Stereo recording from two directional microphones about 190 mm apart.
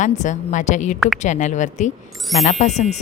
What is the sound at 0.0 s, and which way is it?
Speech, 40° left (ahead or behind).